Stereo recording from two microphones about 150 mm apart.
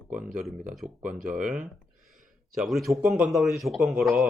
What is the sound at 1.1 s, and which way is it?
Speech, 60° right (ahead or behind).